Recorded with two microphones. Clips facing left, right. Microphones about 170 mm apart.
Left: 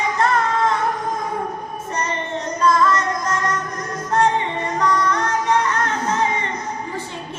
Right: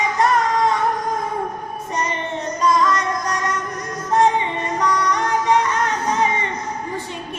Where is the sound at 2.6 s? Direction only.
15° right (ahead or behind).